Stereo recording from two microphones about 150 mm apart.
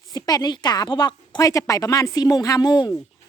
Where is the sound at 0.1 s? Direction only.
25° left (ahead or behind).